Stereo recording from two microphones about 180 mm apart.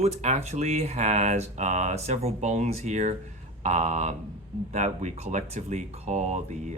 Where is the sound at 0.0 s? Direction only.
35° right (ahead or behind).